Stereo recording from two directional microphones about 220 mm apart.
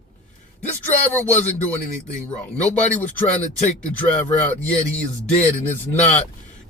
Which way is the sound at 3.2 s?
30° left (ahead or behind).